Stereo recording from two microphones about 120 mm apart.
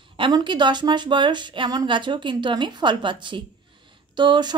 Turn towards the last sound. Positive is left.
turn(degrees=-40)  # may be behind; listen again after turning